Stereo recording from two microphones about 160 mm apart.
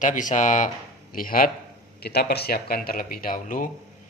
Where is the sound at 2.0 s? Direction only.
85° left.